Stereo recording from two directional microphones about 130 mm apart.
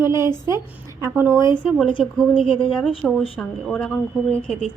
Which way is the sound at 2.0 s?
5° left (ahead or behind).